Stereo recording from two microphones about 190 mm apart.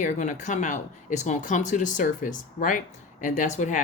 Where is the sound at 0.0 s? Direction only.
40° left (ahead or behind).